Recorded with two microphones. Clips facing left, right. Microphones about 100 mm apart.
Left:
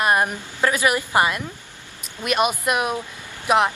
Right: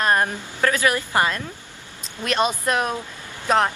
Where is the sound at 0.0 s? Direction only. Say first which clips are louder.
Left 1 dB; 15° left (ahead or behind).